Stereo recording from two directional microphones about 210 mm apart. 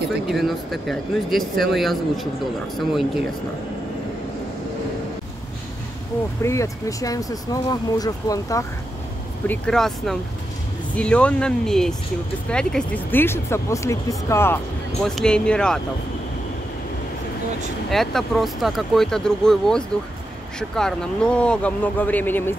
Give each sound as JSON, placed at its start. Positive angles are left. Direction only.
{"t": 0.3, "sound": "speech", "side_deg": 0}
{"t": 6.4, "sound": "speech", "side_deg": 15}
{"t": 9.5, "sound": "speech", "side_deg": 0}
{"t": 17.8, "sound": "speech", "side_deg": 0}